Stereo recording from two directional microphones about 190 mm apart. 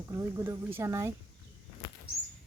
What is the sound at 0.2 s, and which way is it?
Speech, 15° right (ahead or behind).